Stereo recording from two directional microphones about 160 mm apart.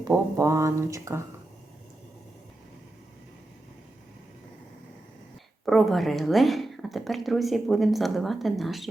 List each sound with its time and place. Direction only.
0.0 s speech: 20° right (ahead or behind)
5.6 s speech: centre (ahead or behind)